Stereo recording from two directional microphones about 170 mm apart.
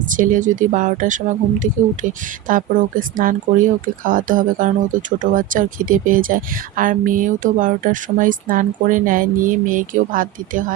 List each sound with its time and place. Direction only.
0.1 s speech: 50° right (ahead or behind)